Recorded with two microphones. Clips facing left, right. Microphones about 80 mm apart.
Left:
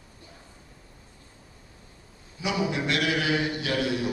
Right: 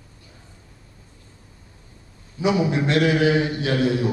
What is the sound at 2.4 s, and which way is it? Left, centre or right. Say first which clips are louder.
Speech: right 7 dB; right.